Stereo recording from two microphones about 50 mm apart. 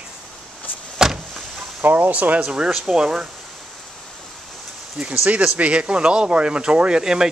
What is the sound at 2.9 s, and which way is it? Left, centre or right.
Speech, centre.